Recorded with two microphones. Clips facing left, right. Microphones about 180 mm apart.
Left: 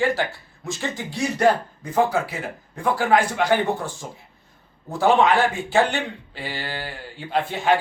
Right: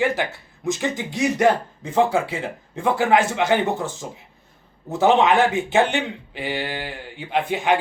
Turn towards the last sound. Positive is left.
turn(degrees=-15)  # may be behind; listen again after turning